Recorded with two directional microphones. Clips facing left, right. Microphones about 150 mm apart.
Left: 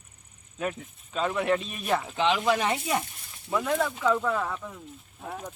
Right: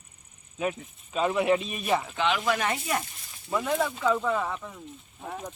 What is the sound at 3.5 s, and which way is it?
Speech, centre (ahead or behind).